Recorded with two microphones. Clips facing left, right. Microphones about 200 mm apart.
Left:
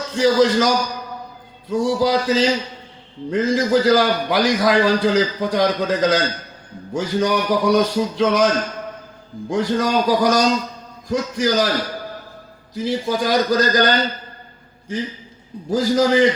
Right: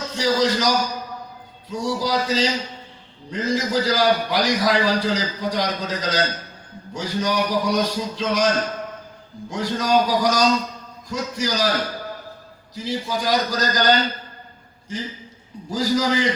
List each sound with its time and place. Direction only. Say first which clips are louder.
0.2 s a man's voice: left 5 dB; 55° left (ahead or behind)
1.7 s a man's voice: left 6 dB; 55° left (ahead or behind)
9.5 s a man's voice: left 2 dB; 55° left (ahead or behind)
12.7 s a man's voice: left 5 dB; 55° left (ahead or behind)